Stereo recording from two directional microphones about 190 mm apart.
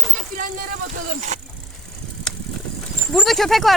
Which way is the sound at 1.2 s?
40° right (ahead or behind).